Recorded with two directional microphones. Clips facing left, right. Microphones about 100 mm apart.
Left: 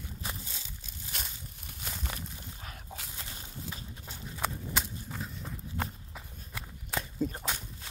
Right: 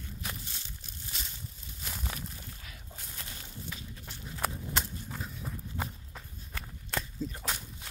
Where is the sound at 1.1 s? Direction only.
55° left (ahead or behind).